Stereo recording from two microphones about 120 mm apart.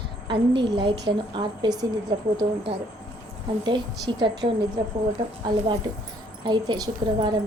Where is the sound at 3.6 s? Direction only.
40° right (ahead or behind).